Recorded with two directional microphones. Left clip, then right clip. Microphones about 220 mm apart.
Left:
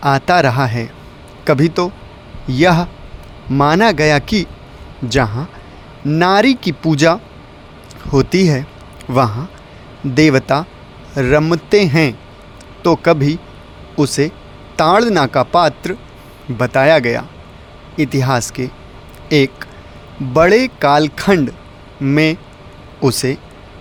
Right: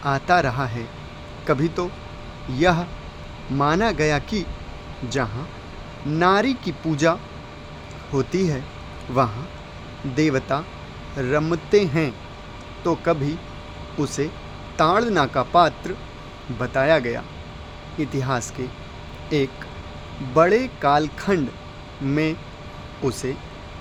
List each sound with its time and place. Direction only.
0.0 s speech: 40° left (ahead or behind)